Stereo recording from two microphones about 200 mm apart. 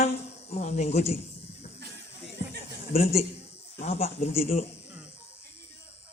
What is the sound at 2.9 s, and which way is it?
Speech, 30° left (ahead or behind).